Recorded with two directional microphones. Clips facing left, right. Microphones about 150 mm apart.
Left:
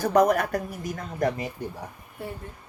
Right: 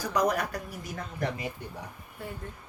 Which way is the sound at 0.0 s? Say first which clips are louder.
Left 7 dB; 50° left (ahead or behind).